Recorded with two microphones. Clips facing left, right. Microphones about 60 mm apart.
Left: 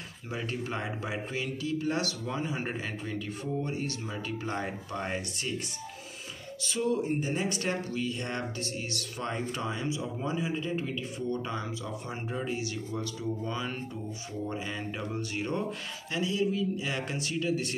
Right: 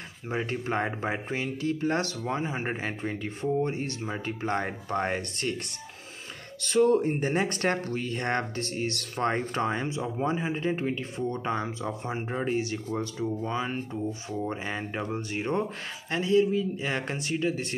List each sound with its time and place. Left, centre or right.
0.3 s speech: right
6.6 s speech: right
16.1 s speech: right